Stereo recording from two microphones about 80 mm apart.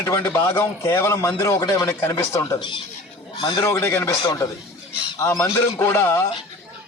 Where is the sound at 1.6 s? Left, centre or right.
Left.